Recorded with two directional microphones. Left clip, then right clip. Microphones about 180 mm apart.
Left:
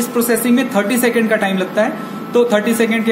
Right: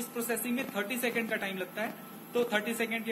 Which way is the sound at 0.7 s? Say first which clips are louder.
Left 15 dB; 50° left (ahead or behind).